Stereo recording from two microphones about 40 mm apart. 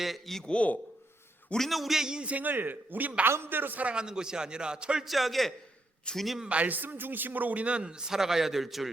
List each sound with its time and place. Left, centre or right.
0.0 s a man's voice: centre
0.4 s speech: left
1.5 s a man's voice: centre
2.0 s a man's voice: right
2.3 s a man's voice: right
3.2 s speech: right
3.9 s a man's voice: centre
5.0 s a man's voice: centre
6.1 s speech: left
6.5 s a man's voice: right
7.8 s a man's voice: centre